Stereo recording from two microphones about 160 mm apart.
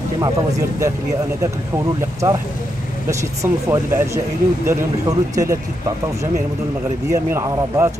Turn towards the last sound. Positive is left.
turn(degrees=-15)  # may be behind; listen again after turning